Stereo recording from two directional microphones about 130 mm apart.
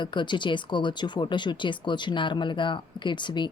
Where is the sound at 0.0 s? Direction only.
35° left (ahead or behind).